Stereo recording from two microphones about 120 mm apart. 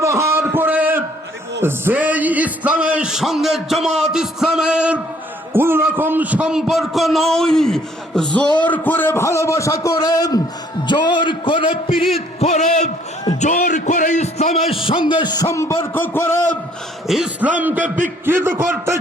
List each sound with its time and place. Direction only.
0.0 s a sound: 25° right (ahead or behind)
1.6 s speech: 15° right (ahead or behind)
5.5 s a man's voice: 20° right (ahead or behind); by 11.7 s 45° left (ahead or behind)
11.9 s a man's voice: centre (ahead or behind)
12.1 s a man's voice: 65° left (ahead or behind)
13.4 s music: 90° left; by 14.5 s 70° left (ahead or behind)
14.7 s speech: 45° left (ahead or behind)
15.5 s a man's voice: 25° left (ahead or behind)
17.1 s a man's voice: 5° right (ahead or behind); by 18.9 s 20° right (ahead or behind)